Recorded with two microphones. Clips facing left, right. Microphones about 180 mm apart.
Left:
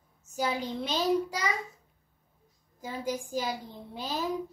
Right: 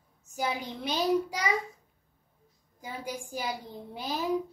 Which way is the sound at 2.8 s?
10° right (ahead or behind).